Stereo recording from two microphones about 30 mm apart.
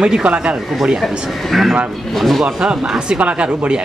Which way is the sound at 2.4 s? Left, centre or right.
Right.